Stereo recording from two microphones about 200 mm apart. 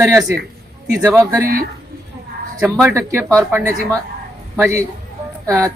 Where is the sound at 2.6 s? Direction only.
5° right (ahead or behind).